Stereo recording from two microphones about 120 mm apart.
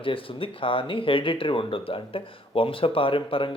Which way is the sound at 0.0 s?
45° left (ahead or behind).